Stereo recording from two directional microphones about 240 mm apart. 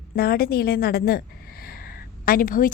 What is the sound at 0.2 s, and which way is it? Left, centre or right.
Speech, left.